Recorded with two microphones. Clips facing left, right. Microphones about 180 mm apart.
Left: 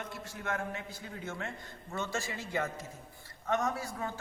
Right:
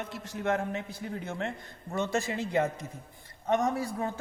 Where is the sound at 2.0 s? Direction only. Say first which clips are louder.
Right 7 dB; 20° right (ahead or behind).